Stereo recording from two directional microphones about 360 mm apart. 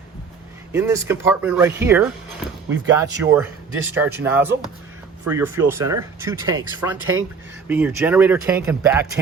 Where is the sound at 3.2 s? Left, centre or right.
Centre.